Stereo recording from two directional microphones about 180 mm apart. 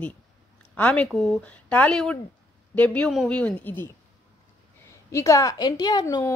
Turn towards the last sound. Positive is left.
turn(degrees=20)  # may be behind; listen again after turning